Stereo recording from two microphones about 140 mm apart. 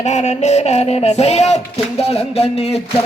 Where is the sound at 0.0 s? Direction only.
55° left (ahead or behind).